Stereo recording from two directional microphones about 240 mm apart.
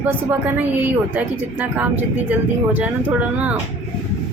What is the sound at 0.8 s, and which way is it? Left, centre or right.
Speech, centre.